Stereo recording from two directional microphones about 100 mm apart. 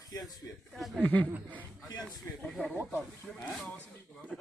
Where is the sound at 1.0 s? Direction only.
15° left (ahead or behind).